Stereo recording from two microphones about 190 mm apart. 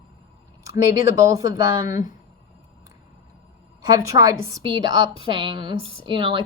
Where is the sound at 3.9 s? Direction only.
15° right (ahead or behind).